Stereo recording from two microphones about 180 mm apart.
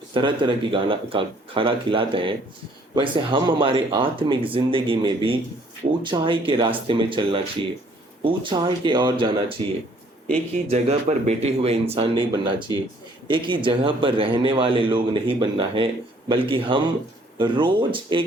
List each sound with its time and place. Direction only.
0.1 s speech: 25° right (ahead or behind)
10.3 s speech: 35° right (ahead or behind)